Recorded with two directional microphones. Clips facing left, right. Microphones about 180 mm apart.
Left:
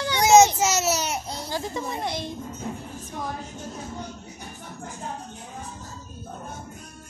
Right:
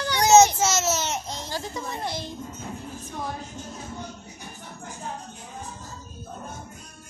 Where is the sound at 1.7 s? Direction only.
15° left (ahead or behind).